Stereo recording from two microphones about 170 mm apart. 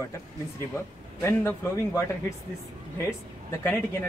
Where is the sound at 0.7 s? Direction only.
15° left (ahead or behind).